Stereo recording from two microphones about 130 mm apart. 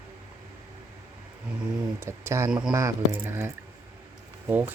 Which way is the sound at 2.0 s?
20° right (ahead or behind).